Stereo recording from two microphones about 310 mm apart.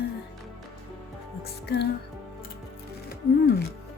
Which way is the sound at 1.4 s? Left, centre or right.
Left.